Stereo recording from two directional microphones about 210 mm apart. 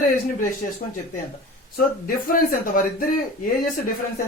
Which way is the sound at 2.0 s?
40° left (ahead or behind).